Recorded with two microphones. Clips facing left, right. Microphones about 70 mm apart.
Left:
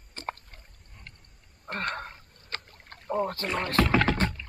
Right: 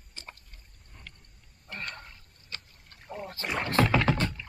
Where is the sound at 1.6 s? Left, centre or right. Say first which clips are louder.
Left 8 dB; left.